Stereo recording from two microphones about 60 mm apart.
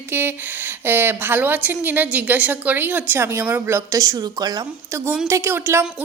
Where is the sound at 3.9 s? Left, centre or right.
Right.